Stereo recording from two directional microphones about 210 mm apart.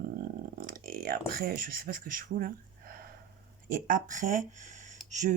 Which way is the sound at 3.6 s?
40° right (ahead or behind).